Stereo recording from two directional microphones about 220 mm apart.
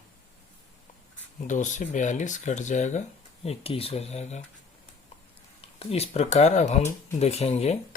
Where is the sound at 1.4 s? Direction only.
35° left (ahead or behind).